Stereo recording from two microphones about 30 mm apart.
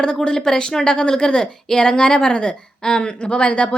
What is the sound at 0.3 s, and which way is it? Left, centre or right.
A woman's voice, left.